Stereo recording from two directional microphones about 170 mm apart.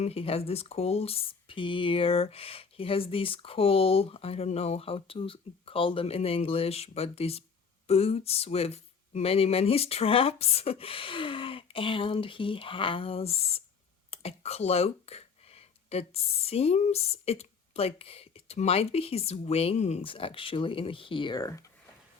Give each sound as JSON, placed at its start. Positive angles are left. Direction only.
{"t": 0.0, "sound": "speech", "side_deg": 35}